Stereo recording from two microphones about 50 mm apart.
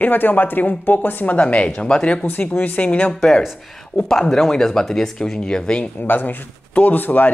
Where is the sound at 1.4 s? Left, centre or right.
Left.